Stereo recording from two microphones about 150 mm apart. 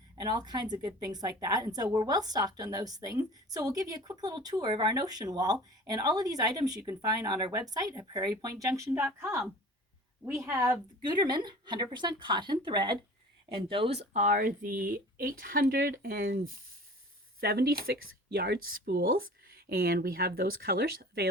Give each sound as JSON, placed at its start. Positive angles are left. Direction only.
{"t": 0.2, "sound": "a woman's voice", "side_deg": -30}
{"t": 10.4, "sound": "a woman's voice", "side_deg": -20}
{"t": 11.0, "sound": "a woman's voice", "side_deg": -30}
{"t": 17.4, "sound": "speech", "side_deg": -90}